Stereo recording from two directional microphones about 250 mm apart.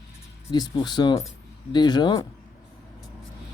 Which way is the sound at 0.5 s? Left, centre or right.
Centre.